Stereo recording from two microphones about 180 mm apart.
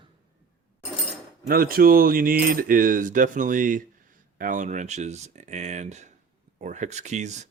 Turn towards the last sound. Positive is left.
turn(degrees=-40)  # may be behind; listen again after turning